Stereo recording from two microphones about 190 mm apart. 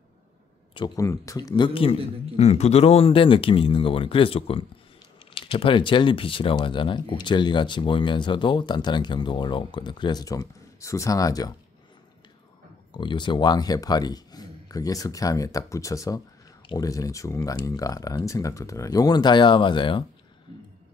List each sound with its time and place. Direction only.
0.7 s speech: 20° left (ahead or behind)
1.6 s speech: 30° left (ahead or behind)
12.9 s speech: 25° left (ahead or behind)